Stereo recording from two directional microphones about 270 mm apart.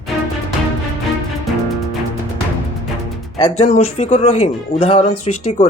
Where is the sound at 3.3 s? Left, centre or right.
Centre.